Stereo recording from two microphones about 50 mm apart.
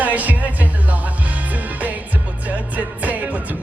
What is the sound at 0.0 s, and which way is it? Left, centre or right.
Music, right.